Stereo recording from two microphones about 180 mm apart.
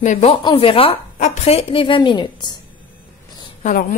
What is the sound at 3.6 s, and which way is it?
Speech, 50° left (ahead or behind).